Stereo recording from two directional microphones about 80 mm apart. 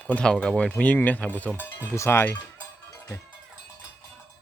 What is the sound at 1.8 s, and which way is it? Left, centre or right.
Speech, left.